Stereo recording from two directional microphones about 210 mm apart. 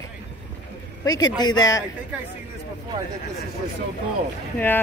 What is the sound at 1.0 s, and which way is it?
Speech, 20° left (ahead or behind).